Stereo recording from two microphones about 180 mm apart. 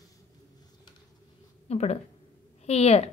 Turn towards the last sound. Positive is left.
turn(degrees=35)  # may be behind; listen again after turning